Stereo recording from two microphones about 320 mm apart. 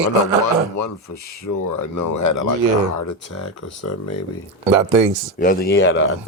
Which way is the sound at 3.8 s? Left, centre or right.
Left.